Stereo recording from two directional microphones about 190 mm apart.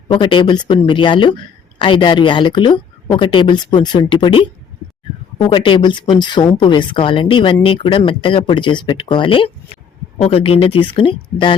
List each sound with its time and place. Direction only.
0.1 s speech: 25° left (ahead or behind)